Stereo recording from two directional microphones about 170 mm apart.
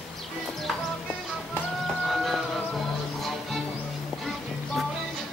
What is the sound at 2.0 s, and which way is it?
Vehicle, centre (ahead or behind).